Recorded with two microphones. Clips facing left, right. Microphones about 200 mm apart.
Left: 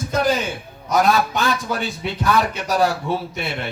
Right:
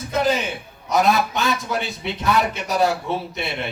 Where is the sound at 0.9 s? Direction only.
20° right (ahead or behind).